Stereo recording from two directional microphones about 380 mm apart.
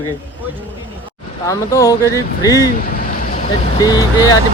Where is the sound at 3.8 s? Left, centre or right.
Centre.